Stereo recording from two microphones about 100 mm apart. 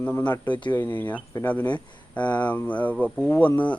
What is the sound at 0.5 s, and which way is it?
Speech, 50° left (ahead or behind).